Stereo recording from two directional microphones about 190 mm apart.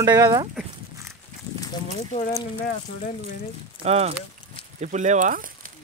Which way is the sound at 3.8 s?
35° right (ahead or behind).